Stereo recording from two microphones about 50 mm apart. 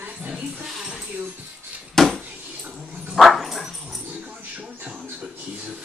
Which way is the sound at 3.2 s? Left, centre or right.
Centre.